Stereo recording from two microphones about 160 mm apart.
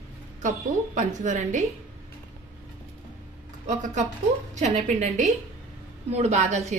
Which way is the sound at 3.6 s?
50° right (ahead or behind).